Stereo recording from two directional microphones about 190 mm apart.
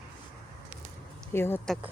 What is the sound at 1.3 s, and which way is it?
Speech, 10° left (ahead or behind).